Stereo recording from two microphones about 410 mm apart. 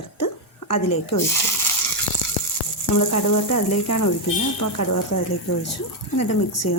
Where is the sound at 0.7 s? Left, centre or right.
Left.